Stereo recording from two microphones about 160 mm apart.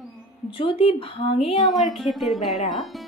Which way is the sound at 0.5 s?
35° left (ahead or behind).